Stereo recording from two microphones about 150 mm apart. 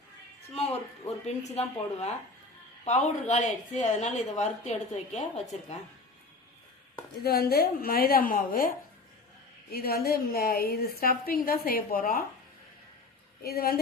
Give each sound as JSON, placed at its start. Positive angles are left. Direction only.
{"t": 1.2, "sound": "a woman's voice", "side_deg": 45}
{"t": 7.3, "sound": "a woman's voice", "side_deg": 90}
{"t": 9.7, "sound": "a woman's voice", "side_deg": 90}
{"t": 13.4, "sound": "a woman's voice", "side_deg": 85}